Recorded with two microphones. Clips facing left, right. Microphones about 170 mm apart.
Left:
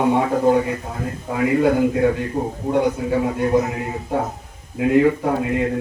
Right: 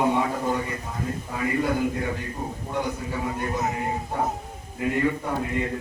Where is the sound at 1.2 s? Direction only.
90° left.